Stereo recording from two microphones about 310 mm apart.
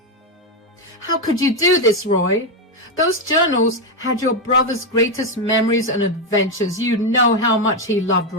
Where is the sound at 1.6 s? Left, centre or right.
Left.